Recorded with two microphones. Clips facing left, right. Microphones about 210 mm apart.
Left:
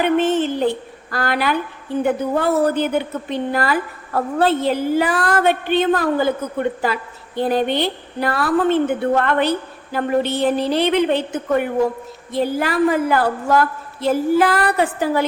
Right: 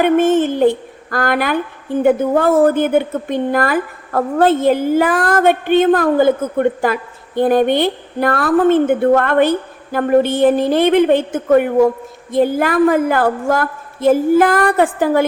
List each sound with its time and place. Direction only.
0.0 s a woman's voice: 50° right (ahead or behind)